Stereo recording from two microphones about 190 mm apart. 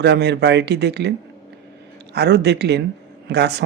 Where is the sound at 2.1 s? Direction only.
60° right (ahead or behind).